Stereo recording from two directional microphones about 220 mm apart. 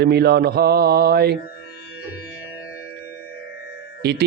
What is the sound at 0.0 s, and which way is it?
Speech, 50° right (ahead or behind).